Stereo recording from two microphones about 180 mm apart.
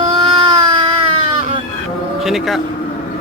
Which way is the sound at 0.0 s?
30° right (ahead or behind).